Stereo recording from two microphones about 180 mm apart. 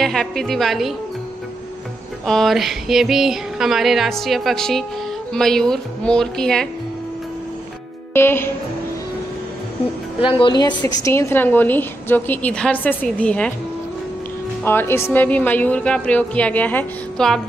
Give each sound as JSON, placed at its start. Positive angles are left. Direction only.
{"t": 0.0, "sound": "music", "side_deg": 0}
{"t": 2.2, "sound": "a sound", "side_deg": 0}
{"t": 8.1, "sound": "music", "side_deg": 15}
{"t": 10.2, "sound": "a woman's voice", "side_deg": 25}
{"t": 14.6, "sound": "a woman's voice", "side_deg": 10}